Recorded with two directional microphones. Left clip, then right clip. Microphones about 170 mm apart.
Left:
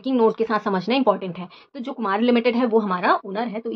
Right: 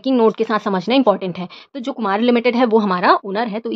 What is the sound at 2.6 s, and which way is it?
Speech, 65° right (ahead or behind).